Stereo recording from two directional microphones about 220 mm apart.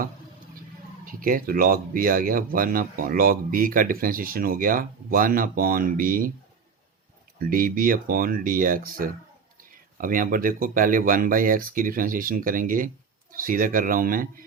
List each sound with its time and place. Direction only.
1.0 s speech: 40° right (ahead or behind)
7.3 s speech: 40° right (ahead or behind)